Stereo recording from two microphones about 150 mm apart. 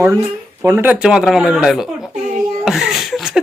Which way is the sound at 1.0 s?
5° right (ahead or behind).